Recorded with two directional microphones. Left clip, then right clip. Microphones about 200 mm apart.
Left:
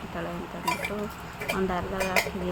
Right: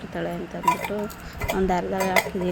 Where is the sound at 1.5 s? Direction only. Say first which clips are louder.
Right 5 dB; 25° right (ahead or behind).